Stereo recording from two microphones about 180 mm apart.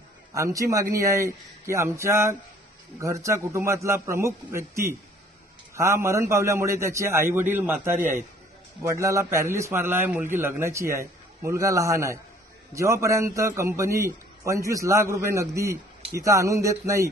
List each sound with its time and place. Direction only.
0.3 s a man's voice: 15° right (ahead or behind)